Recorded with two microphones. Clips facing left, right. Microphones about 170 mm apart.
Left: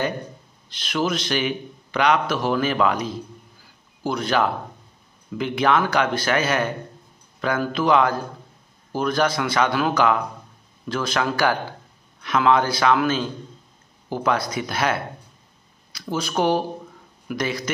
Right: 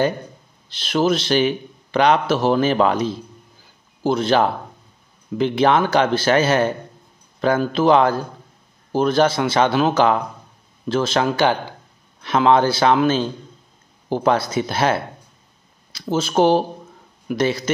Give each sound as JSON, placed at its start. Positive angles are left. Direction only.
{"t": 0.7, "sound": "speech", "side_deg": -30}